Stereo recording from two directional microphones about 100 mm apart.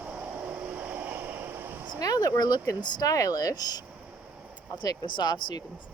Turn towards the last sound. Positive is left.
turn(degrees=45)  # may be behind; listen again after turning